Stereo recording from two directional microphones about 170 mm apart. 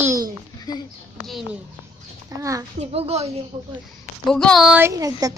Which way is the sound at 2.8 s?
35° right (ahead or behind).